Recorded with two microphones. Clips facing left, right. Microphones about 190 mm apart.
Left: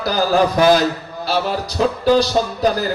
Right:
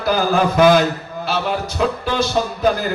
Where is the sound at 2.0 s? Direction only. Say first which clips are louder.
Left 6 dB; 35° left (ahead or behind).